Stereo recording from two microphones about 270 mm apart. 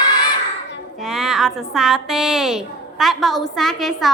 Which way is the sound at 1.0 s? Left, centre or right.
Centre.